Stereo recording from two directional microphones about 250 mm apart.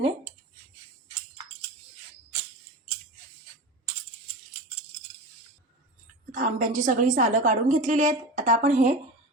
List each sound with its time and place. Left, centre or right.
6.3 s a woman's voice: right